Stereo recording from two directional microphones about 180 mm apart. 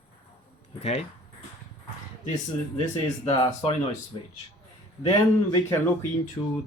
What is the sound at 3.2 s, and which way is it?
Speech, 25° left (ahead or behind).